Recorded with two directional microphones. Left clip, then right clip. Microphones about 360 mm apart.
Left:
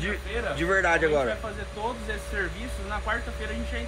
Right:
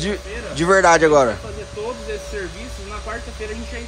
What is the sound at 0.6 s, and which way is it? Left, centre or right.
Speech, right.